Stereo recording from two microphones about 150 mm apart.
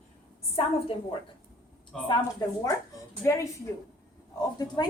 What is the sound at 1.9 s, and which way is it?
Speech, 5° left (ahead or behind).